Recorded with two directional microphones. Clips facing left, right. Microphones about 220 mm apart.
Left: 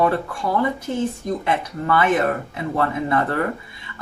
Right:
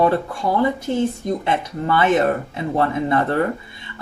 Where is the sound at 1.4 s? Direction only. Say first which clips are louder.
Left 1 dB; 25° right (ahead or behind).